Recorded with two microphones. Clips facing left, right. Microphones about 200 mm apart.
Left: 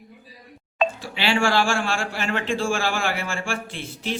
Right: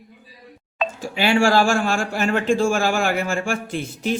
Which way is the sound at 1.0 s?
45° right (ahead or behind).